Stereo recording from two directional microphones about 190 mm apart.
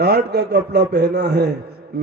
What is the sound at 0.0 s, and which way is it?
A man's voice, 60° right (ahead or behind).